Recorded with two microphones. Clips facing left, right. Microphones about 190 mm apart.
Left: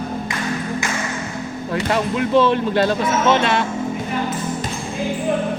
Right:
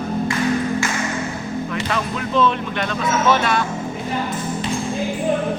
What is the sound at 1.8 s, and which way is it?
Speech, 30° left (ahead or behind).